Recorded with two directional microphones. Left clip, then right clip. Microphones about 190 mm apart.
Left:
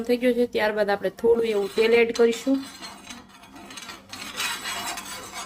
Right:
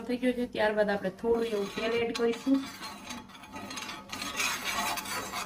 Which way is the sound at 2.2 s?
40° left (ahead or behind).